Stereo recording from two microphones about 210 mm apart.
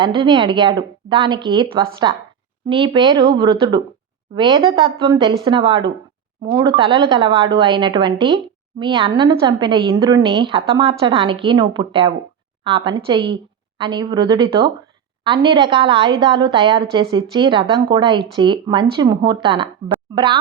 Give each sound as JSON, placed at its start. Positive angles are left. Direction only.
{"t": 0.0, "sound": "a woman's voice", "side_deg": -25}